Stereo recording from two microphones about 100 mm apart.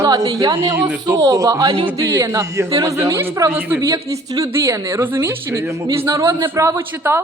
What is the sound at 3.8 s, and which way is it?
Speech, 30° right (ahead or behind).